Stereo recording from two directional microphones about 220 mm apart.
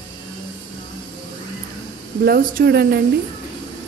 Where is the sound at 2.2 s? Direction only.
45° right (ahead or behind).